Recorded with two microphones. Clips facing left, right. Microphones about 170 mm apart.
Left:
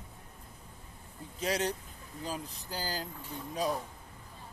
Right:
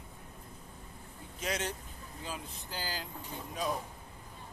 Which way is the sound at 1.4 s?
35° left (ahead or behind).